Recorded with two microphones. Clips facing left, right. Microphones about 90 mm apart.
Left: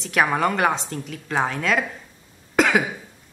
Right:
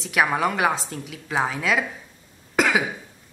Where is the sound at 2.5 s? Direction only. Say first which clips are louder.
Left 2 dB; centre (ahead or behind).